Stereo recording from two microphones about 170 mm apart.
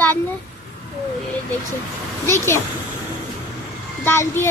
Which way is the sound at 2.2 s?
15° left (ahead or behind).